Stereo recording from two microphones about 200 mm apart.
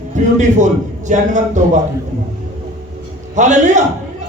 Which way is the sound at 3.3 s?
35° right (ahead or behind).